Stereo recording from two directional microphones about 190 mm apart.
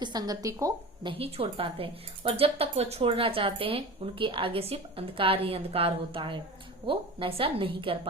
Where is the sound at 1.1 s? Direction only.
30° right (ahead or behind).